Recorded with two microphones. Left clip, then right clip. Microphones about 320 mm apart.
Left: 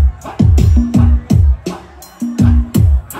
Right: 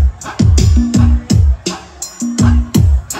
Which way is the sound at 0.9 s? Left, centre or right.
Right.